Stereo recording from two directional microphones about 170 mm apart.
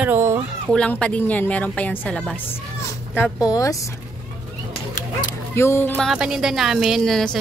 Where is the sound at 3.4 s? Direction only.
20° left (ahead or behind).